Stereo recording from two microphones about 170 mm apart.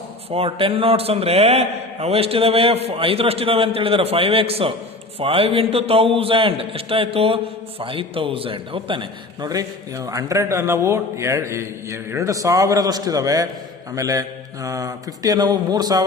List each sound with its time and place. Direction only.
0.3 s a man's voice: 35° right (ahead or behind)